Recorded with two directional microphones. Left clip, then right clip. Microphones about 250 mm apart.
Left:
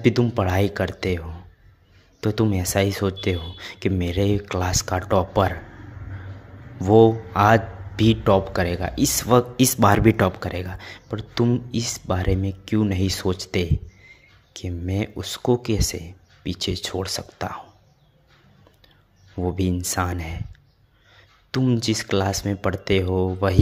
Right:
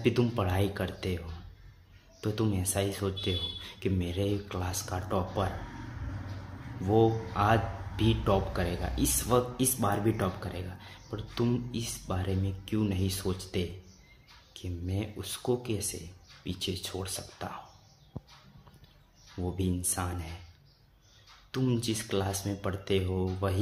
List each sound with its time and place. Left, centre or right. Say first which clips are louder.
0.0 s a man's voice: left 8 dB; left
6.8 s a man's voice: left 11 dB; left
19.4 s a man's voice: left 9 dB; left
21.5 s a man's voice: left 9 dB; left